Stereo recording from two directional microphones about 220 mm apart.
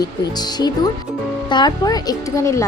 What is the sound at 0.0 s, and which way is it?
A woman's voice, 20° left (ahead or behind).